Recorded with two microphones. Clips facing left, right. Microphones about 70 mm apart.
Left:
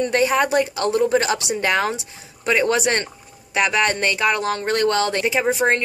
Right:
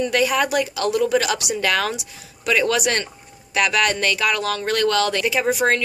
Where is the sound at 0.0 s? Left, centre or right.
Left.